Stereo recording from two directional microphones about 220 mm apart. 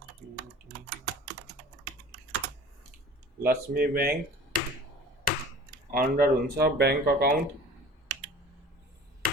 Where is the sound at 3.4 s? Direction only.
40° right (ahead or behind).